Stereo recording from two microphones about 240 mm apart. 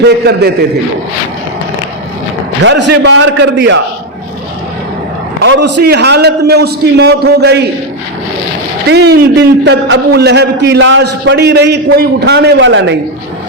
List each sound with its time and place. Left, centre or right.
0.0 s a man's voice: right
2.6 s a man's voice: right
5.5 s a man's voice: right
8.9 s a man's voice: right